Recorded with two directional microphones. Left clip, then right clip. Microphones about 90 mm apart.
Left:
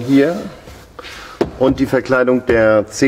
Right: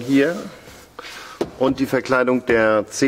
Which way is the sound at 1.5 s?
35° right (ahead or behind).